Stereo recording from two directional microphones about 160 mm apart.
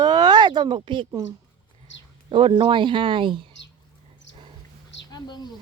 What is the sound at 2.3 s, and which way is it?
Speech, 35° right (ahead or behind).